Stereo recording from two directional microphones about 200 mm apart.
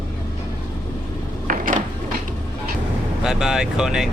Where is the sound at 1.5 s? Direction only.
40° right (ahead or behind).